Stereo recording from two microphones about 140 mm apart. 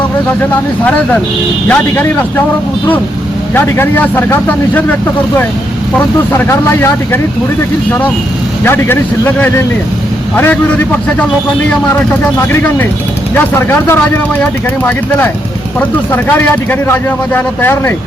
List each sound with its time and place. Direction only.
1.6 s speech: 15° left (ahead or behind)
3.5 s speech: 15° left (ahead or behind)
6.3 s speech: 15° left (ahead or behind)
8.6 s speech: 15° left (ahead or behind)
12.5 s speech: 10° left (ahead or behind)